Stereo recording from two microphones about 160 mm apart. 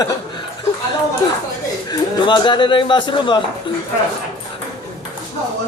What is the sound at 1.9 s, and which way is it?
A man's voice, 30° left (ahead or behind).